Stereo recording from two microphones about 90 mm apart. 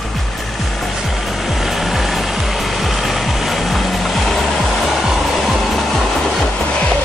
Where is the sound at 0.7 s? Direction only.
Centre (ahead or behind).